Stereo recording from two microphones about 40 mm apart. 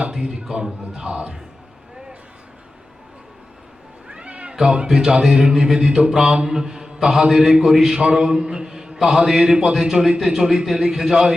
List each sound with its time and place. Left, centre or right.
0.1 s mantra: centre
4.1 s cat: right
4.5 s a man's voice: centre
7.9 s mantra: centre
9.0 s a man's voice: centre
10.2 s mantra: centre
10.8 s a man's voice: centre